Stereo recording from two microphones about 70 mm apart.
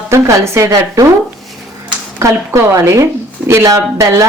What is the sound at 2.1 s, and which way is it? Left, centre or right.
A woman's voice, right.